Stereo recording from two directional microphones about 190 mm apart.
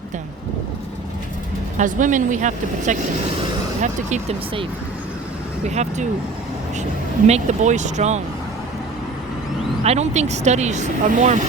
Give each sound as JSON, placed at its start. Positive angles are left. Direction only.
{"t": 1.8, "sound": "speech", "side_deg": -40}
{"t": 5.6, "sound": "speech", "side_deg": -35}
{"t": 7.3, "sound": "speech", "side_deg": -35}
{"t": 9.8, "sound": "speech", "side_deg": -35}